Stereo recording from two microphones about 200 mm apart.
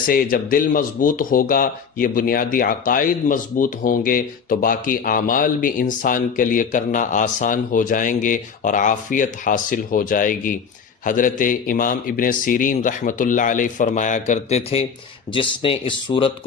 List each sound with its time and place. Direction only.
0.1 s speech: 45° left (ahead or behind); by 16.3 s 25° left (ahead or behind)